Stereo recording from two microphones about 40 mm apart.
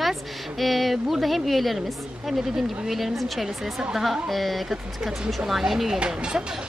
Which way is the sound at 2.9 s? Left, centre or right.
Centre.